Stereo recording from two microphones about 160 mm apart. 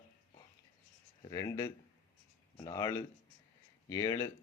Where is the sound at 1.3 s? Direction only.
20° left (ahead or behind).